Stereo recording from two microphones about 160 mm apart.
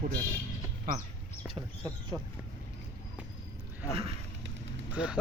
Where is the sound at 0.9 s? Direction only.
55° right (ahead or behind).